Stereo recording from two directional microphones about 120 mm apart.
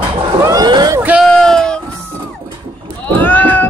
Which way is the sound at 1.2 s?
5° left (ahead or behind).